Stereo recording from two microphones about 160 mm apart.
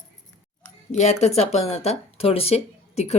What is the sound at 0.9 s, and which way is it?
A woman's voice, 45° left (ahead or behind).